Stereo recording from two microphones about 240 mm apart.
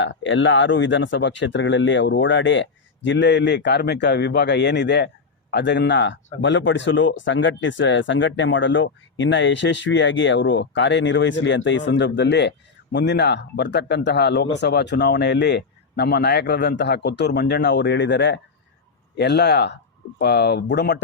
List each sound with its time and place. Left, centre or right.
0.0 s speech: left